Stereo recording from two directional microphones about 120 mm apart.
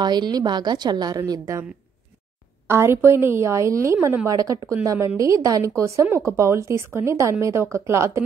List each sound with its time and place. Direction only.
0.0 s a woman's voice: 35° right (ahead or behind)
2.7 s speech: 20° right (ahead or behind)